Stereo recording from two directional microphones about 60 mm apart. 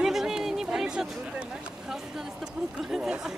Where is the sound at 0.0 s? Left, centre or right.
Centre.